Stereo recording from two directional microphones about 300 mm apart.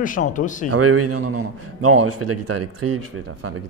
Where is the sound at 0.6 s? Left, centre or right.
Right.